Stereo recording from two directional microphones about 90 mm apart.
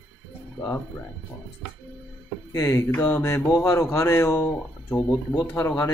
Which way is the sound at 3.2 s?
30° left (ahead or behind).